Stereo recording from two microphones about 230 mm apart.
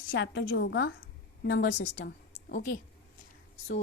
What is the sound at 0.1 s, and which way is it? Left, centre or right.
Speech, left.